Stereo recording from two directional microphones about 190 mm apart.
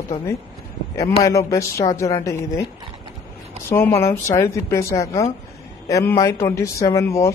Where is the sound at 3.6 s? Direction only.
15° left (ahead or behind).